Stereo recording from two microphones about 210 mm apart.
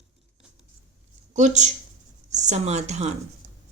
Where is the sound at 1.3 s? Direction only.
35° right (ahead or behind).